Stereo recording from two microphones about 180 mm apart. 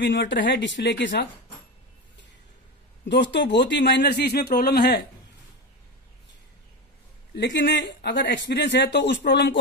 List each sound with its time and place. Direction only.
0.0 s speech: 85° left
3.1 s speech: 75° left (ahead or behind); by 5.0 s 60° left (ahead or behind)
7.3 s speech: 75° left (ahead or behind)